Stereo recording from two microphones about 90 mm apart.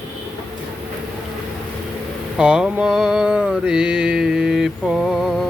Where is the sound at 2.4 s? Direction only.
10° right (ahead or behind).